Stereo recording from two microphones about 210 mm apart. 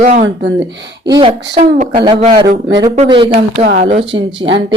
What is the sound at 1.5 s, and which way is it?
Speech, 25° right (ahead or behind).